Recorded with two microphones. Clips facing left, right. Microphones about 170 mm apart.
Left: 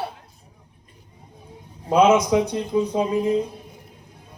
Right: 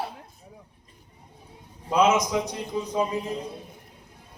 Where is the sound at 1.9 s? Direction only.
60° left (ahead or behind).